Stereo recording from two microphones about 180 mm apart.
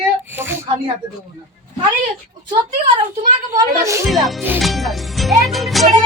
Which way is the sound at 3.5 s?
15° right (ahead or behind).